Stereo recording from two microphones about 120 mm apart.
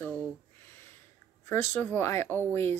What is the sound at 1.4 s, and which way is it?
Speech, 20° left (ahead or behind).